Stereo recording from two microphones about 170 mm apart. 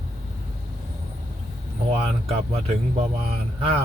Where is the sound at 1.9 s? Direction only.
35° right (ahead or behind).